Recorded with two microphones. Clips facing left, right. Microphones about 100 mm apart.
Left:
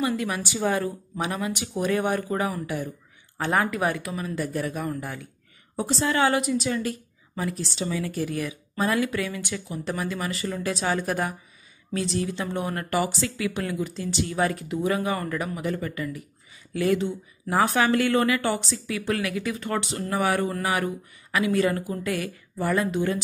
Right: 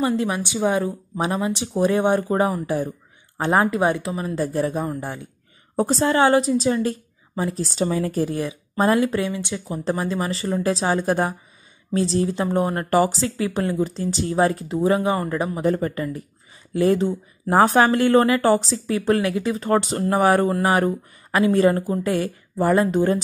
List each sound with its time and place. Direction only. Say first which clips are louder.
0.0 s speech: right 5 dB; 30° right (ahead or behind)
1.1 s speech: right 7 dB; 30° right (ahead or behind)
5.8 s a woman's voice: right 5 dB; 40° right (ahead or behind)
7.6 s speech: right 6 dB; 40° right (ahead or behind)